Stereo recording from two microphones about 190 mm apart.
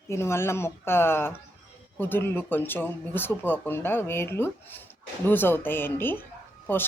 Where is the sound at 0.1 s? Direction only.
15° left (ahead or behind).